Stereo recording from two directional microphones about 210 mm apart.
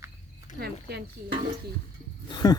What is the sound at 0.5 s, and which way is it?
Speech, 50° right (ahead or behind).